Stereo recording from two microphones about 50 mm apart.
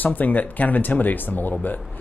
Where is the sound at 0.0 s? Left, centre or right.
Left.